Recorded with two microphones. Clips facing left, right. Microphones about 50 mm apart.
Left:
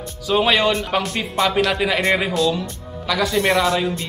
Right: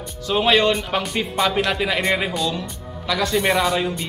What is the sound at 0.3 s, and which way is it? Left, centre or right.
A man's voice, centre.